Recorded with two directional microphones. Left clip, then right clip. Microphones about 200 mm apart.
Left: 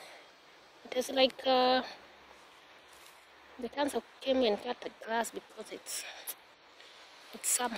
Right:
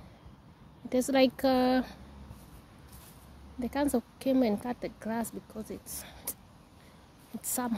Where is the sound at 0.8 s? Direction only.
20° right (ahead or behind).